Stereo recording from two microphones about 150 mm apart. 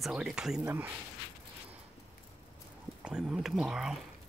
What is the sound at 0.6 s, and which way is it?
Speech, 15° right (ahead or behind).